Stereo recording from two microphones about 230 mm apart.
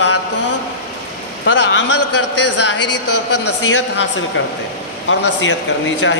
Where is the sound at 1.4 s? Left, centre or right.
Left.